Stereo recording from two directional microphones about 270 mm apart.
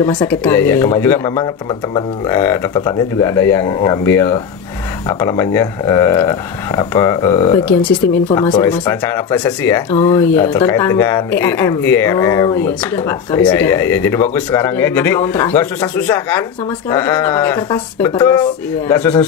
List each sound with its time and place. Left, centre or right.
0.0 s speech: centre
8.3 s speech: centre
8.5 s speech: centre